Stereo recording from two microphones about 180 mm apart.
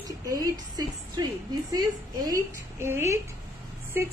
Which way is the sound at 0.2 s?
20° right (ahead or behind).